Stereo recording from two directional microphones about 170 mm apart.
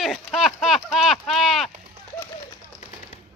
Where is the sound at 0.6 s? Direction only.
Centre (ahead or behind).